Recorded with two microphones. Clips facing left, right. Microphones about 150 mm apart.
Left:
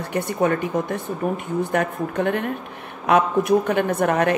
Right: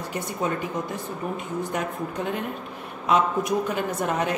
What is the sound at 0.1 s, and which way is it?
Speech, 65° left (ahead or behind).